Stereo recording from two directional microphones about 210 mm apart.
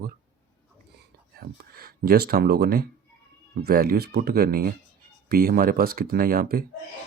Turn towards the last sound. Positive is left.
turn(degrees=-45)  # may be behind; listen again after turning